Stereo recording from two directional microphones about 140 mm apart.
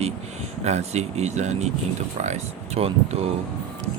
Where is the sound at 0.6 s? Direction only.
50° right (ahead or behind).